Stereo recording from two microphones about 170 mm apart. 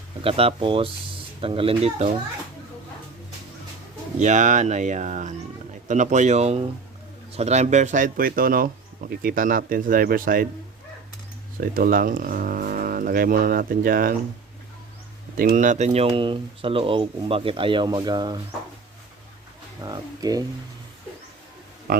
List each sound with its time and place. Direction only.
0.2 s speech: 35° right (ahead or behind)
4.2 s speech: 45° right (ahead or behind)
11.6 s speech: 55° right (ahead or behind)
15.4 s speech: 55° right (ahead or behind); by 18.3 s 25° right (ahead or behind)
19.8 s speech: 20° right (ahead or behind)
21.9 s speech: 60° right (ahead or behind)